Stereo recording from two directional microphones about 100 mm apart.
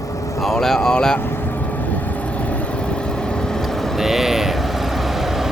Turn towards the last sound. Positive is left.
turn(degrees=-5)  # may be behind; listen again after turning